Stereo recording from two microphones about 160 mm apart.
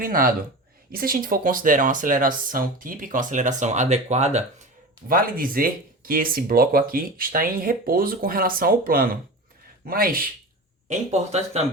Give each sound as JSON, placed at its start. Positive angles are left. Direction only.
{"t": 0.0, "sound": "speech", "side_deg": -65}
{"t": 5.0, "sound": "speech", "side_deg": -60}
{"t": 10.8, "sound": "speech", "side_deg": -45}